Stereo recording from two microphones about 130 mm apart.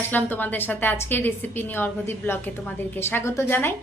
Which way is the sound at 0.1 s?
15° left (ahead or behind).